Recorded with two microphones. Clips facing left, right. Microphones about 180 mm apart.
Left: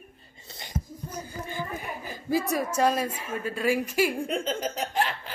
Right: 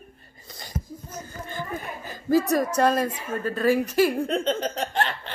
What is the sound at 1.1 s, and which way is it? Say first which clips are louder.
Speech: left 1 dB; 10° left (ahead or behind).